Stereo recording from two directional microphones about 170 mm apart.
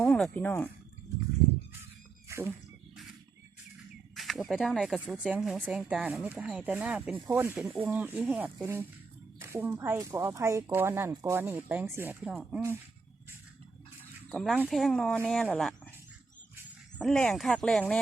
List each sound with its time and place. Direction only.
0.0 s speech: 5° left (ahead or behind)
2.2 s a sound: 15° right (ahead or behind)
4.1 s speech: centre (ahead or behind)
14.0 s a sound: 5° left (ahead or behind)
14.5 s speech: 5° right (ahead or behind)
17.0 s speech: 5° left (ahead or behind)